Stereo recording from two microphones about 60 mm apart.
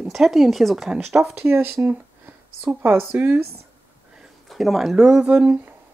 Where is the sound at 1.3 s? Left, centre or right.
Right.